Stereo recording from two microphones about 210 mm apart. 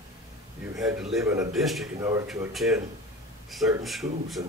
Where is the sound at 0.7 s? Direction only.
Centre (ahead or behind).